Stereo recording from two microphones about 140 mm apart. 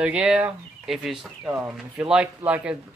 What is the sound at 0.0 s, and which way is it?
Speech, 5° right (ahead or behind).